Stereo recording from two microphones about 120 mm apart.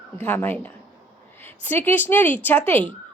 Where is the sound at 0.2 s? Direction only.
15° left (ahead or behind).